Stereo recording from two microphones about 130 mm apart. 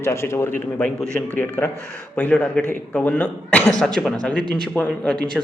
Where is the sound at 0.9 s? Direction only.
5° left (ahead or behind).